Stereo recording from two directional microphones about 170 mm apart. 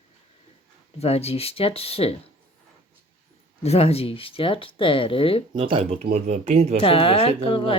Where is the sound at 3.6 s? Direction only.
40° left (ahead or behind).